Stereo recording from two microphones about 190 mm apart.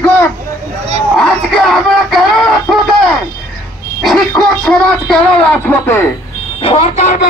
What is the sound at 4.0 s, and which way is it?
Speech, centre (ahead or behind).